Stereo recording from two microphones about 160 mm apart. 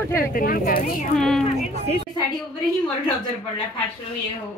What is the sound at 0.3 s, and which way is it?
Speech, 60° left (ahead or behind).